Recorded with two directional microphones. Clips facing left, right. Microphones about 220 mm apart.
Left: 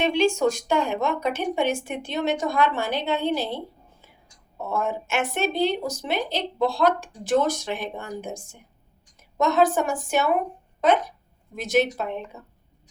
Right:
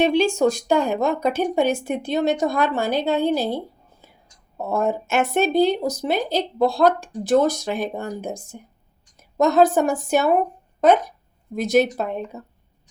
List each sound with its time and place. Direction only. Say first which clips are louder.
0.0 s speech: right 3 dB; 35° right (ahead or behind)
11.5 s speech: right 4 dB; 40° right (ahead or behind)